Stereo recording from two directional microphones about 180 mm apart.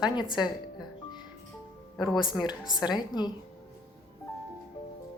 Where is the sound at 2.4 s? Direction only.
25° left (ahead or behind).